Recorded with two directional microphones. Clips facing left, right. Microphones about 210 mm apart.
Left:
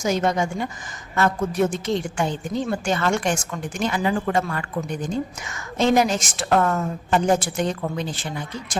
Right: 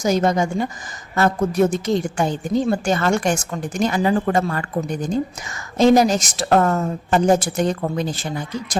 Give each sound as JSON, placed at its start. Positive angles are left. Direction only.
{"t": 0.0, "sound": "a woman's voice", "side_deg": -40}